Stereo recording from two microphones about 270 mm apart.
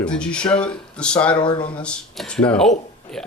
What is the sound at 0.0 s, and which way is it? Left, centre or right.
Speech, centre.